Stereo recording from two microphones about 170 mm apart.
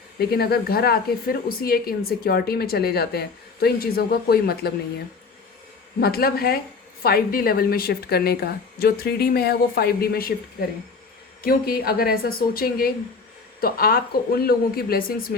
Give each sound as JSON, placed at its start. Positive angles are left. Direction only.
{"t": 0.2, "sound": "speech", "side_deg": 65}
{"t": 6.0, "sound": "speech", "side_deg": 65}
{"t": 11.4, "sound": "speech", "side_deg": 60}